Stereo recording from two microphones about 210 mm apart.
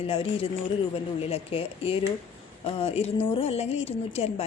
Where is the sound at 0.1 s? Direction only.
25° left (ahead or behind).